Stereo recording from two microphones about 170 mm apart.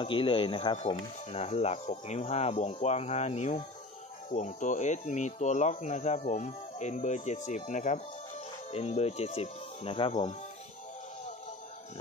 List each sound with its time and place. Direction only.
0.0 s speech: 30° left (ahead or behind)